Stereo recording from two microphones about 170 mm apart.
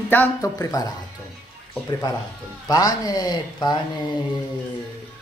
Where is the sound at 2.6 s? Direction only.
20° left (ahead or behind).